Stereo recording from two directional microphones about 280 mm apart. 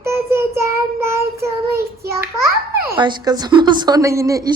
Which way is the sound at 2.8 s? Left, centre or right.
Centre.